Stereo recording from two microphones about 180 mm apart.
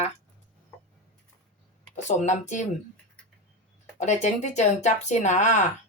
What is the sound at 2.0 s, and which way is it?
Speech, 40° left (ahead or behind).